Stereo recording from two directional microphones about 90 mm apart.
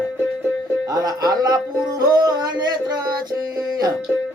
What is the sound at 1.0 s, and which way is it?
Music, 45° right (ahead or behind).